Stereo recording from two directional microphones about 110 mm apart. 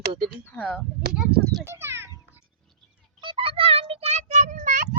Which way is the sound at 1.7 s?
25° right (ahead or behind).